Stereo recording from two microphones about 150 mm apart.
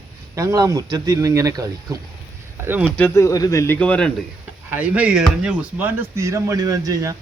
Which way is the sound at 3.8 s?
10° left (ahead or behind).